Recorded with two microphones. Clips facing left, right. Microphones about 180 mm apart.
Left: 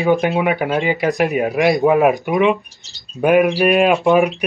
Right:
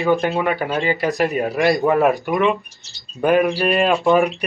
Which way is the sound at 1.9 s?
10° left (ahead or behind).